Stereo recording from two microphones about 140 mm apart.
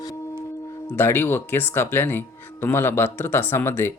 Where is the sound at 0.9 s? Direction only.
15° left (ahead or behind).